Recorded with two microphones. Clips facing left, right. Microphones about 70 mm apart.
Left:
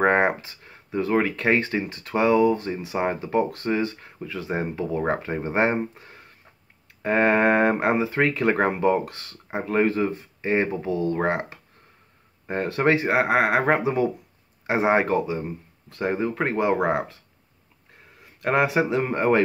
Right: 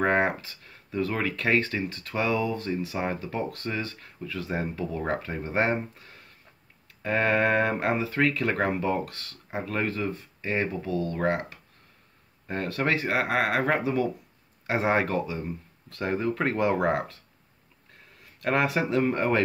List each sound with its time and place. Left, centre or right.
0.0 s speech: left
18.2 s speech: centre